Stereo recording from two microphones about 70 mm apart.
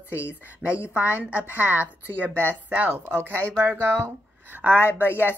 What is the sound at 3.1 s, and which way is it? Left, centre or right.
Speech, right.